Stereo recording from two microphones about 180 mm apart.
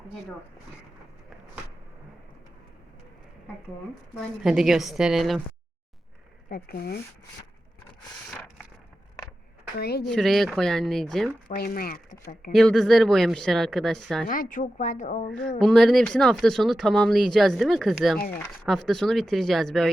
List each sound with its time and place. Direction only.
4.2 s speech: centre (ahead or behind)
6.5 s speech: 55° left (ahead or behind)
8.3 s a sound: 10° left (ahead or behind)
9.7 s speech: 60° left (ahead or behind)
10.0 s speech: centre (ahead or behind)
11.4 s speech: 55° left (ahead or behind)
12.5 s speech: centre (ahead or behind)
14.3 s speech: 50° left (ahead or behind)
15.5 s speech: 5° left (ahead or behind)